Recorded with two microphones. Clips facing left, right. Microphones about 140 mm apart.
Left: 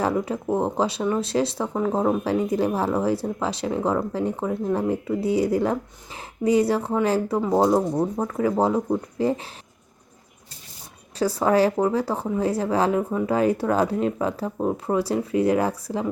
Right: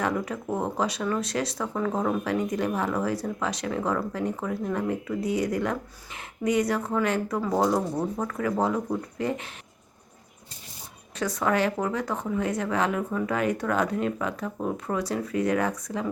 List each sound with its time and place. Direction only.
0.0 s speech: 30° left (ahead or behind)
11.2 s speech: 30° left (ahead or behind)